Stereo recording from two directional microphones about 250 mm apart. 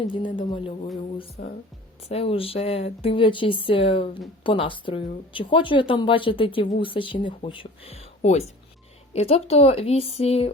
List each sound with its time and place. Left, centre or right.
0.1 s speech: centre